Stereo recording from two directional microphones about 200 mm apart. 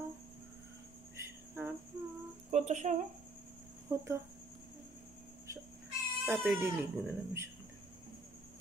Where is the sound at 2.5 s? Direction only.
35° right (ahead or behind).